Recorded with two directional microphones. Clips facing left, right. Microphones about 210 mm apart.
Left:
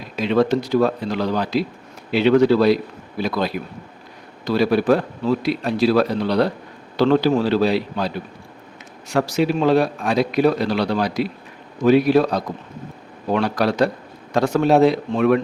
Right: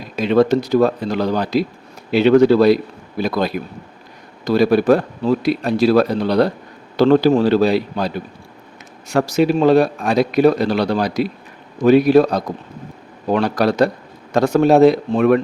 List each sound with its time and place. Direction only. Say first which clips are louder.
0.2 s a man's voice: right 3 dB; 45° right (ahead or behind)
9.1 s a man's voice: right 4 dB; 45° right (ahead or behind)